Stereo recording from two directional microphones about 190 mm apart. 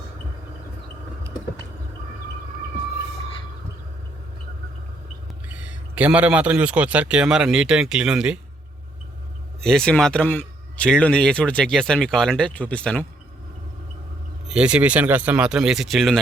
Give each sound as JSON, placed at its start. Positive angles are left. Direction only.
{"t": 5.5, "sound": "a man's voice", "side_deg": -5}
{"t": 9.6, "sound": "a man's voice", "side_deg": 5}
{"t": 14.4, "sound": "a man's voice", "side_deg": -5}